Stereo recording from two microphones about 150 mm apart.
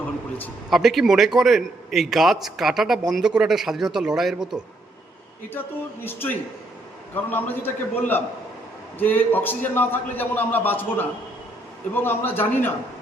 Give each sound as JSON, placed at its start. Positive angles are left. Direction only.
{"t": 0.0, "sound": "a sound", "side_deg": 10}
{"t": 0.7, "sound": "a man's voice", "side_deg": 0}
{"t": 5.5, "sound": "a man's voice", "side_deg": 15}